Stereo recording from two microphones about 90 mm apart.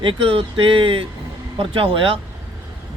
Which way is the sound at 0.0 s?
80° right.